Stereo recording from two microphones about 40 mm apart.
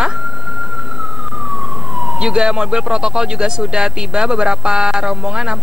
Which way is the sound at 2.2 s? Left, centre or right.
Centre.